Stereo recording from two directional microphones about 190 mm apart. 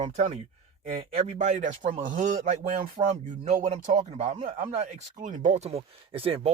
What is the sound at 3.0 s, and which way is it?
Speech, 25° right (ahead or behind).